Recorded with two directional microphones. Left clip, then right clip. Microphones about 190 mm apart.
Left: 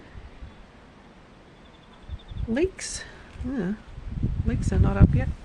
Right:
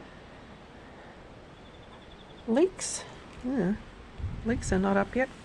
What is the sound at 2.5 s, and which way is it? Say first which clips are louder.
A woman's voice: right 1 dB; 15° left (ahead or behind).